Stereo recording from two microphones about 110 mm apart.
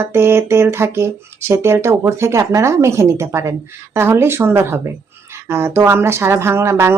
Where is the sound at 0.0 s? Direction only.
20° right (ahead or behind).